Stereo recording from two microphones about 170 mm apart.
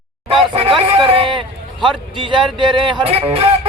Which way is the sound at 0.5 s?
35° right (ahead or behind).